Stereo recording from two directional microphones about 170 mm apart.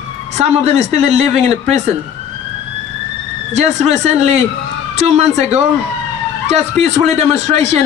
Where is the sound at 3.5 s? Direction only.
40° right (ahead or behind).